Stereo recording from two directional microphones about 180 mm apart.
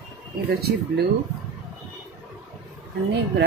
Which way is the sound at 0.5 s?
60° right (ahead or behind).